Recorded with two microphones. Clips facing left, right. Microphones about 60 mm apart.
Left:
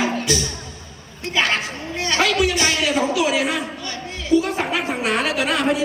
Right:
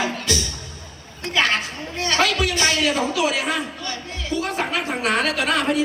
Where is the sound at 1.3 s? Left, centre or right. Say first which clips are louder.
Even; left.